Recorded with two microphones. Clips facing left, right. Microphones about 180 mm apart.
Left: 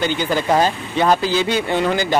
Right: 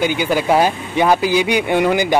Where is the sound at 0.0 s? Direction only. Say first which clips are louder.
Right 2 dB; 10° right (ahead or behind).